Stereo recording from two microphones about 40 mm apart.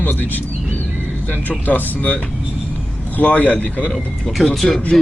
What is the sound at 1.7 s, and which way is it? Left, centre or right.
Speech, left.